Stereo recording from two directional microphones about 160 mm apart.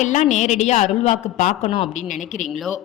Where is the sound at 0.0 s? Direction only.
50° left (ahead or behind).